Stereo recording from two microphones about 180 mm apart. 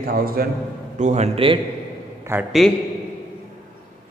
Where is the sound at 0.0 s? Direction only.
55° right (ahead or behind).